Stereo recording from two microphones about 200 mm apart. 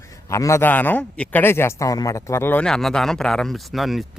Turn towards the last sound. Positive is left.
turn(degrees=0)  # may be behind; listen again after turning